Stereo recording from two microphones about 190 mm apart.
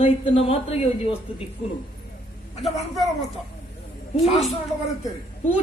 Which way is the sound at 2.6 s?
Centre (ahead or behind).